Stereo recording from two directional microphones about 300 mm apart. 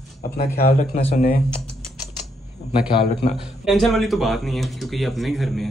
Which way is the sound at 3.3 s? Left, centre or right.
Centre.